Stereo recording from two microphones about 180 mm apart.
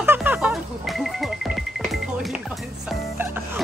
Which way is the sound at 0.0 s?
10° right (ahead or behind).